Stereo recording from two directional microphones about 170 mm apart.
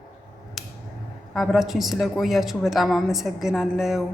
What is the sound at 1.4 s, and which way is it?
A woman's voice, centre (ahead or behind).